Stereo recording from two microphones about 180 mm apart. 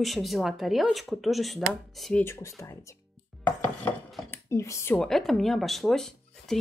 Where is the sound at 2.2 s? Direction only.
15° left (ahead or behind).